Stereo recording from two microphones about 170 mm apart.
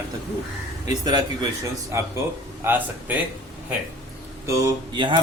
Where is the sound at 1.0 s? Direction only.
25° right (ahead or behind).